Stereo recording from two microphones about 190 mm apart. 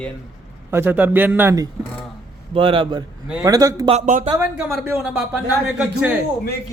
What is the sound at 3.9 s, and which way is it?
Speech, 35° right (ahead or behind).